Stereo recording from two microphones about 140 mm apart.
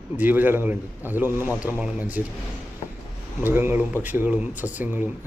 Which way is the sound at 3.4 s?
15° right (ahead or behind).